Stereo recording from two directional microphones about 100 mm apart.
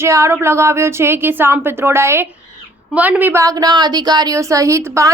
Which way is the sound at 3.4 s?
40° right (ahead or behind).